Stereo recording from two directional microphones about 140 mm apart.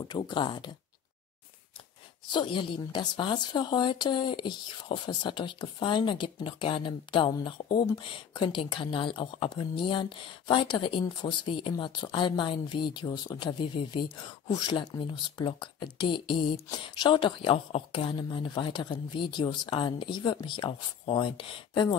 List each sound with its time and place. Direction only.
0.2 s speech: 35° left (ahead or behind)
2.2 s speech: 35° left (ahead or behind)